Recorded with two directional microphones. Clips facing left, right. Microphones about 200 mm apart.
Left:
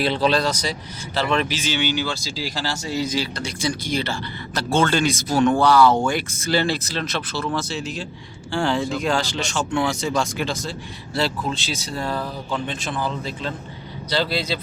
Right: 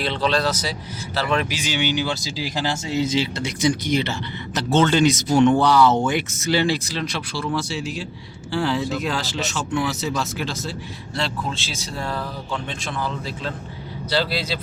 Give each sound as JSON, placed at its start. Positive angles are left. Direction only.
{"t": 0.0, "sound": "speech", "side_deg": 10}